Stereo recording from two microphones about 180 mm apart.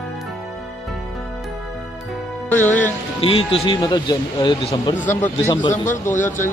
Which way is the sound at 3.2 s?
30° left (ahead or behind).